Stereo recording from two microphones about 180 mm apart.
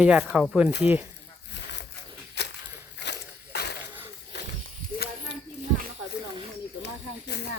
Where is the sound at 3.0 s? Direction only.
65° left (ahead or behind).